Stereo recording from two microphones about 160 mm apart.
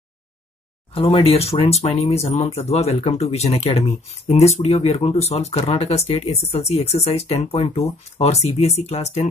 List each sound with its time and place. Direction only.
0.9 s speech: 35° left (ahead or behind)